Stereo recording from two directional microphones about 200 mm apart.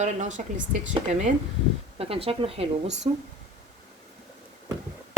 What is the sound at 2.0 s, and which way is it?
Speech, 30° right (ahead or behind).